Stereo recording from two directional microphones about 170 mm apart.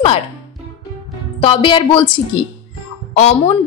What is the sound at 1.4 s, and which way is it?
Speech, 30° left (ahead or behind).